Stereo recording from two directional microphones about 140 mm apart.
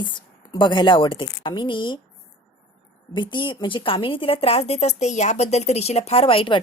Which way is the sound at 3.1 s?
35° left (ahead or behind).